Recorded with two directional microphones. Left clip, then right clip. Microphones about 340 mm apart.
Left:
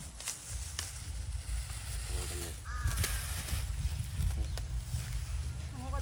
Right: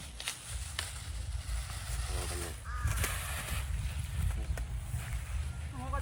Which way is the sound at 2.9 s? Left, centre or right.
Centre.